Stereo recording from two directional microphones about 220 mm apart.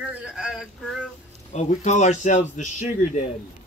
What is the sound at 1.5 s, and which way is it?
A man's voice, 30° left (ahead or behind).